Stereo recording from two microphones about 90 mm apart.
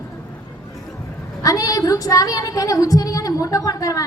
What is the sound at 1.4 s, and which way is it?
A woman's voice, 40° left (ahead or behind).